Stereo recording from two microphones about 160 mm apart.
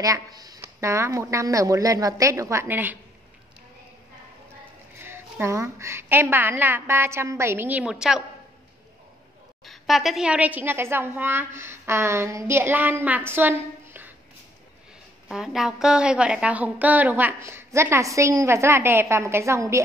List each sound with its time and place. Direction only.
0.0 s speech: 20° right (ahead or behind)
5.0 s a woman's voice: 15° right (ahead or behind)
9.7 s a woman's voice: centre (ahead or behind)
15.2 s a woman's voice: 5° right (ahead or behind); by 19.8 s 20° right (ahead or behind)